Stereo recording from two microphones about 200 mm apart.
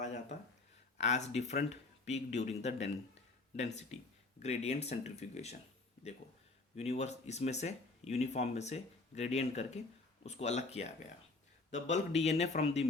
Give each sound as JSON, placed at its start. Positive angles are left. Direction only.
{"t": 0.0, "sound": "a sound", "side_deg": 35}
{"t": 0.9, "sound": "speech", "side_deg": 35}
{"t": 6.7, "sound": "speech", "side_deg": 35}